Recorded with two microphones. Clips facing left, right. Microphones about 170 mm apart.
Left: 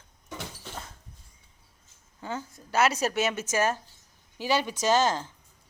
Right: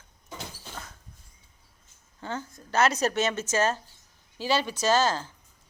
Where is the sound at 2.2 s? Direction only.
10° left (ahead or behind).